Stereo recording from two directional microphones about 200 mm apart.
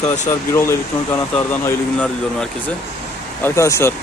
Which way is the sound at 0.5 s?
15° left (ahead or behind).